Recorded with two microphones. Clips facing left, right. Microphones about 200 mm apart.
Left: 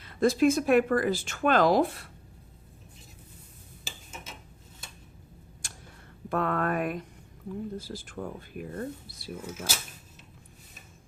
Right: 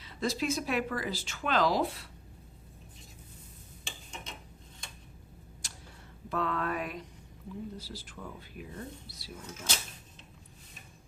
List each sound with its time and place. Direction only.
0.0 s speech: 55° left (ahead or behind)
3.8 s tick-tock: 5° left (ahead or behind)
5.6 s tick-tock: 50° left (ahead or behind)
6.2 s speech: 55° left (ahead or behind)
9.5 s speech: 5° left (ahead or behind)